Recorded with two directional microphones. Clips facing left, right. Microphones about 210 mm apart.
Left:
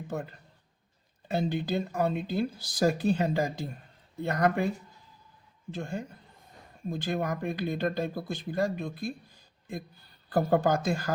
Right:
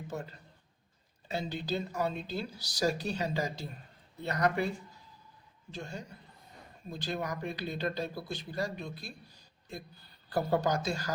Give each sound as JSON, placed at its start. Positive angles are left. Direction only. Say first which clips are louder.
{"t": 1.3, "sound": "speech", "louder": "left 5 dB", "side_deg": 55}
{"t": 5.7, "sound": "speech", "louder": "left 6 dB", "side_deg": 55}
{"t": 10.3, "sound": "speech", "louder": "left 5 dB", "side_deg": 50}